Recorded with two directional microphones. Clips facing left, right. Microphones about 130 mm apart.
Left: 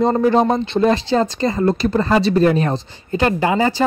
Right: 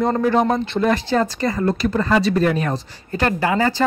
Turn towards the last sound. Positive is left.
turn(degrees=20)  # may be behind; listen again after turning